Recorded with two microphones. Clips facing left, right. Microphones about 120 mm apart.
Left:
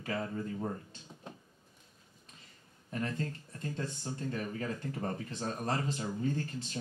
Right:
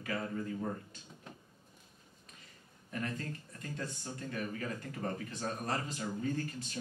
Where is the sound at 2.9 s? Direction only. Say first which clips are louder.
Left 3 dB; 30° left (ahead or behind).